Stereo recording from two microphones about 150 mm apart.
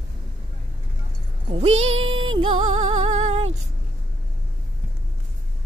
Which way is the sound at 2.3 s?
30° right (ahead or behind).